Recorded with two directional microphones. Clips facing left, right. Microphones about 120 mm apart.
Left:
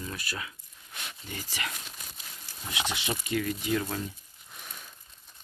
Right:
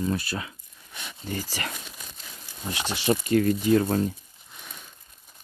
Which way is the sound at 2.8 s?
35° right (ahead or behind).